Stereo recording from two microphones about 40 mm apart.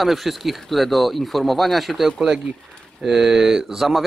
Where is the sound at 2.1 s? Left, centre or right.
Centre.